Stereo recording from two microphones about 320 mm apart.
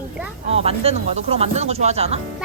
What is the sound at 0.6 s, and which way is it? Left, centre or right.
A woman's voice, centre.